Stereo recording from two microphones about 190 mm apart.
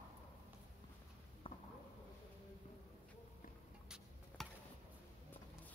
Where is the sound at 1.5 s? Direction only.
30° left (ahead or behind).